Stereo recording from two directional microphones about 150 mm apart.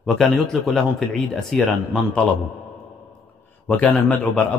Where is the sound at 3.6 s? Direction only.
10° left (ahead or behind).